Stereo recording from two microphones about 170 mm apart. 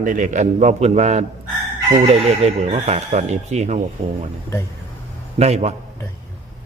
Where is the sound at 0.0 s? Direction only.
50° right (ahead or behind).